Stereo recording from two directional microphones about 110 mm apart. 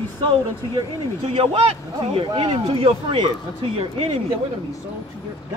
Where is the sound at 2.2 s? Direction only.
45° right (ahead or behind).